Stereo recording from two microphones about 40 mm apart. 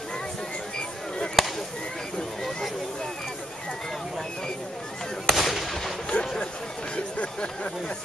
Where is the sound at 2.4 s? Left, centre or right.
Centre.